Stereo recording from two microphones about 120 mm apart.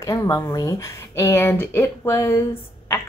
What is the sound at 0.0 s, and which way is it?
A woman's voice, 30° left (ahead or behind).